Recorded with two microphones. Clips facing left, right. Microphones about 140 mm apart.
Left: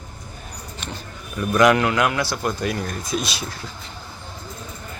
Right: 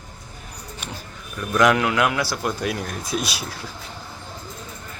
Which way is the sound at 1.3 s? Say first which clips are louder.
Left 2 dB; 5° left (ahead or behind).